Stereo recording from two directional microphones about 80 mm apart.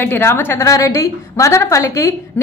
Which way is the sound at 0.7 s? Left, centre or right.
Left.